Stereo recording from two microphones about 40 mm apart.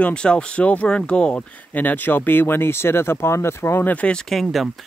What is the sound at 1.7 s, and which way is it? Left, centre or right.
Speech, left.